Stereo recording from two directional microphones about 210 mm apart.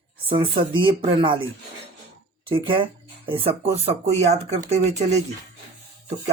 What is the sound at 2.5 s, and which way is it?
Speech, 25° right (ahead or behind).